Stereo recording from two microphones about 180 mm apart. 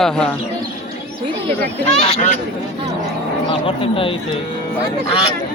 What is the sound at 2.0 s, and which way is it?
Speech, 40° left (ahead or behind).